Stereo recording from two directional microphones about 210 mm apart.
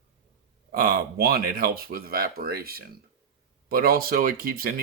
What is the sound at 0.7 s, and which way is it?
Speech, 45° right (ahead or behind).